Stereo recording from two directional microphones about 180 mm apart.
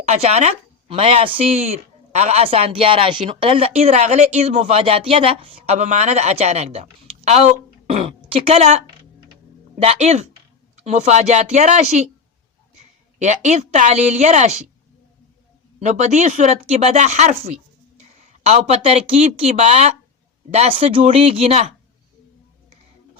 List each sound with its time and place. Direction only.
0.0 s speech: 40° right (ahead or behind)
13.1 s speech: 40° right (ahead or behind)
15.8 s speech: 40° right (ahead or behind)